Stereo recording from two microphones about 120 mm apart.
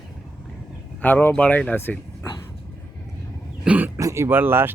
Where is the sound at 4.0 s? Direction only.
25° right (ahead or behind).